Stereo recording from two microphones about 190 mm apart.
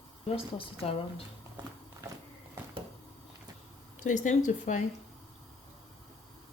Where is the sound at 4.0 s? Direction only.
40° left (ahead or behind).